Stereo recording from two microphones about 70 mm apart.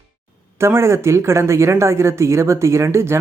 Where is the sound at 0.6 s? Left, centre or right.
Right.